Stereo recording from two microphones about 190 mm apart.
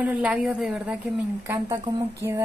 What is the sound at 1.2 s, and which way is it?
Speech, 15° right (ahead or behind).